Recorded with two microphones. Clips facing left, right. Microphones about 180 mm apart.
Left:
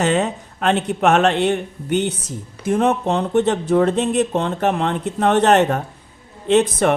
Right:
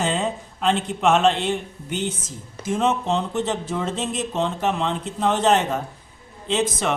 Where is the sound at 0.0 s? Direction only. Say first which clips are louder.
Left 5 dB; 70° left (ahead or behind).